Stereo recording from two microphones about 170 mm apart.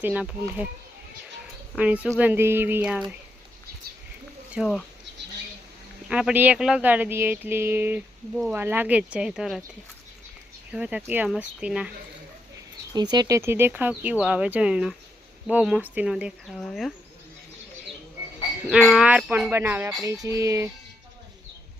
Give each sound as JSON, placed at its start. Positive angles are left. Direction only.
{"t": 0.0, "sound": "speech", "side_deg": -10}
{"t": 1.7, "sound": "speech", "side_deg": -10}
{"t": 4.6, "sound": "speech", "side_deg": -5}
{"t": 6.1, "sound": "speech", "side_deg": -5}
{"t": 10.7, "sound": "speech", "side_deg": -5}
{"t": 12.9, "sound": "speech", "side_deg": -25}
{"t": 18.7, "sound": "speech", "side_deg": -5}
{"t": 20.1, "sound": "a sound", "side_deg": -20}